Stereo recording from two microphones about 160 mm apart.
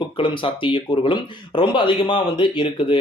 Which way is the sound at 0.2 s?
30° left (ahead or behind).